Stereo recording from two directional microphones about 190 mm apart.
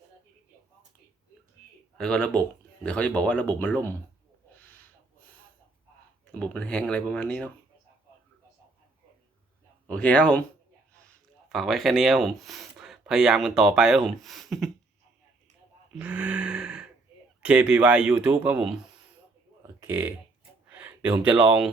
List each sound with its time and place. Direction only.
2.0 s speech: 5° left (ahead or behind)
4.5 s a sound: 10° left (ahead or behind)
6.4 s speech: 5° left (ahead or behind)
9.9 s speech: 5° left (ahead or behind)
16.0 s a sound: 5° right (ahead or behind)
17.4 s speech: 5° right (ahead or behind)